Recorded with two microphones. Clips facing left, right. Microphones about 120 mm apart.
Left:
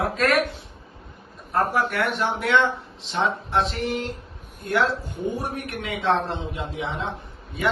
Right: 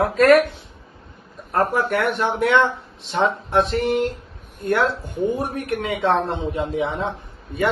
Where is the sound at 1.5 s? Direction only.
55° right (ahead or behind).